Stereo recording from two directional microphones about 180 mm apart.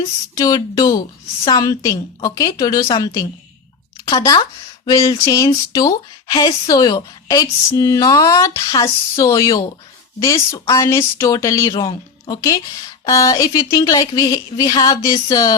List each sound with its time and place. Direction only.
0.3 s speech: 20° left (ahead or behind)
11.7 s speech: 30° left (ahead or behind)